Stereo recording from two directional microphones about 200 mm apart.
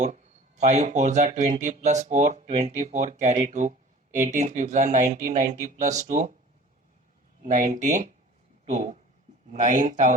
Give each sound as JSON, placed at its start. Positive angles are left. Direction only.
{"t": 0.0, "sound": "speech", "side_deg": -35}
{"t": 7.4, "sound": "speech", "side_deg": -40}